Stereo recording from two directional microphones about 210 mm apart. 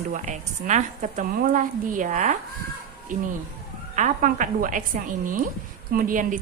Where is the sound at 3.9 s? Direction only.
40° right (ahead or behind).